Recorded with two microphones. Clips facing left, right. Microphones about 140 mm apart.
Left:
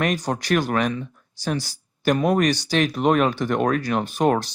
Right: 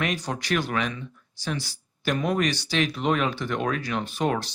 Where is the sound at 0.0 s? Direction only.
45° left (ahead or behind).